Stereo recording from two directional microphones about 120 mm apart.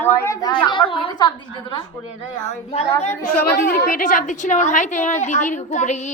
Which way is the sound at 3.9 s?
90° left.